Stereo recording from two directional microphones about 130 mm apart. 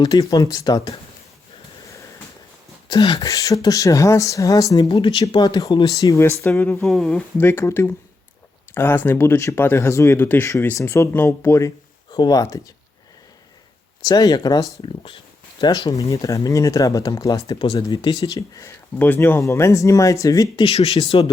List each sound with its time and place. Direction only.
0.0 s speech: 25° left (ahead or behind)
2.9 s speech: 30° left (ahead or behind); by 6.8 s 15° left (ahead or behind)
6.8 s speech: 5° left (ahead or behind)
7.3 s speech: 15° left (ahead or behind)
14.0 s speech: 30° left (ahead or behind)
20.7 s speech: 50° left (ahead or behind)